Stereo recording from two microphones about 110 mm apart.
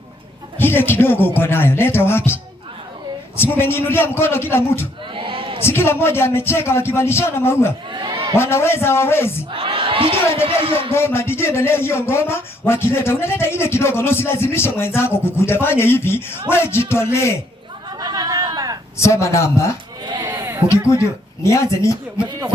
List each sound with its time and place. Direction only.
0.6 s speech: 20° left (ahead or behind)
5.1 s a sound: 55° right (ahead or behind)
5.6 s speech: 20° left (ahead or behind)
7.9 s a sound: 45° right (ahead or behind)
8.4 s speech: 20° left (ahead or behind)
9.5 s crowd: 55° right (ahead or behind)
10.4 s speech: 55° right (ahead or behind)
10.9 s speech: 20° left (ahead or behind)
18.0 s a sound: 35° right (ahead or behind)
18.9 s speech: 25° left (ahead or behind)
20.1 s sheep: 45° right (ahead or behind)
20.3 s bleat: 20° right (ahead or behind)
20.7 s speech: 25° left (ahead or behind)